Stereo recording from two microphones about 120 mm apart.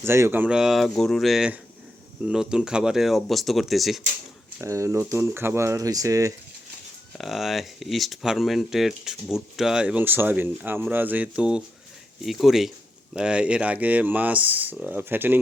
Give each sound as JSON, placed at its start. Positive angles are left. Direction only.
{"t": 0.0, "sound": "speech", "side_deg": -20}
{"t": 4.6, "sound": "speech", "side_deg": -25}
{"t": 7.2, "sound": "speech", "side_deg": 0}